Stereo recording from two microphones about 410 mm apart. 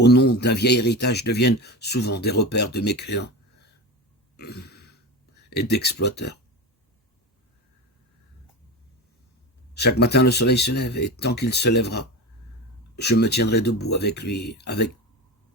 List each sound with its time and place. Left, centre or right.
0.0 s a man's voice: left
4.4 s burping: left
5.5 s a man's voice: left
9.7 s a man's voice: left